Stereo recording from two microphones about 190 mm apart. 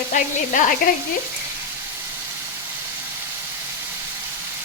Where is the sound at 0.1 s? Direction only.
45° left (ahead or behind).